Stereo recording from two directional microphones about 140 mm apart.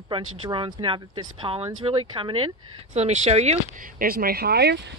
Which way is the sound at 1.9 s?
40° right (ahead or behind).